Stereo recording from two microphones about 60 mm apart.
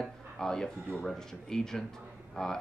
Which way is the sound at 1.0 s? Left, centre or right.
Centre.